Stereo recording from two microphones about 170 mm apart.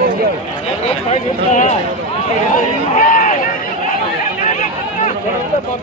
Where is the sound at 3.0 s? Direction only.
50° left (ahead or behind).